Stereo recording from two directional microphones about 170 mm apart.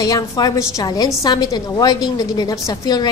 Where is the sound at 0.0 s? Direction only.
20° left (ahead or behind).